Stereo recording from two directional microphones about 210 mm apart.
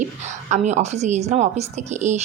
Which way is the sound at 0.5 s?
35° right (ahead or behind).